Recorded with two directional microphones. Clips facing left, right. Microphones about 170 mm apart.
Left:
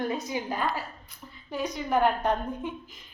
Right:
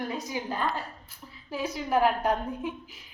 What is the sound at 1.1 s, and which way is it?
A woman's voice, centre (ahead or behind).